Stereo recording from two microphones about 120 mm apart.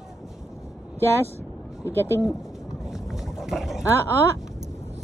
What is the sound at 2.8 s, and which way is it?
Boat, 5° right (ahead or behind).